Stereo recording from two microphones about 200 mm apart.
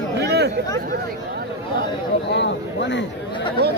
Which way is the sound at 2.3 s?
60° left (ahead or behind).